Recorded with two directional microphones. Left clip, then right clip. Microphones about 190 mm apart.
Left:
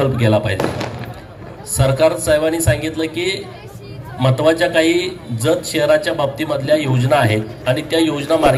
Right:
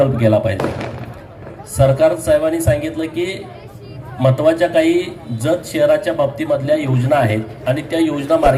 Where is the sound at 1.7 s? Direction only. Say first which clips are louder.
Right 2 dB; 15° right (ahead or behind).